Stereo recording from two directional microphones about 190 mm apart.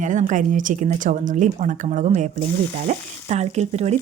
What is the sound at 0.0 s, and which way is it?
Speech, 40° right (ahead or behind).